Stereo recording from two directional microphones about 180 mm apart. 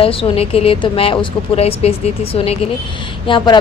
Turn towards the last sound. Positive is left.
turn(degrees=30)  # may be behind; listen again after turning